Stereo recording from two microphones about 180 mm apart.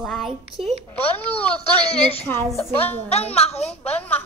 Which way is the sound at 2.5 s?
10° left (ahead or behind).